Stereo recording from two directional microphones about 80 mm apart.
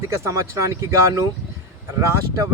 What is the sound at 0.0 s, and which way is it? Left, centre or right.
Speech, right.